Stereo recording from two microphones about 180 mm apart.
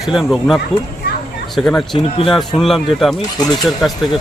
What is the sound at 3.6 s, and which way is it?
Speech, centre (ahead or behind).